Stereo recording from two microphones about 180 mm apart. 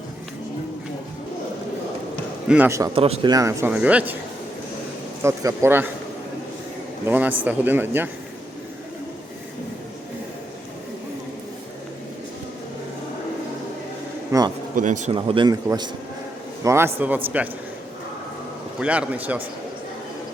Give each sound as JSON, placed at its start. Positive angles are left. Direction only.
{"t": 2.5, "sound": "speech", "side_deg": -10}
{"t": 2.9, "sound": "a man's voice", "side_deg": -30}
{"t": 3.3, "sound": "speech", "side_deg": -15}
{"t": 3.7, "sound": "speech", "side_deg": -5}
{"t": 5.2, "sound": "speech", "side_deg": -15}
{"t": 7.1, "sound": "speech", "side_deg": -10}
{"t": 14.3, "sound": "a sound", "side_deg": -20}
{"t": 14.8, "sound": "speech", "side_deg": -45}
{"t": 15.1, "sound": "a man's voice", "side_deg": -30}
{"t": 18.8, "sound": "speech", "side_deg": -5}